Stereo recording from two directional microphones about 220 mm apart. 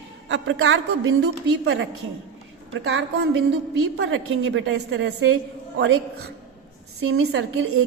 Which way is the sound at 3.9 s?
55° right (ahead or behind).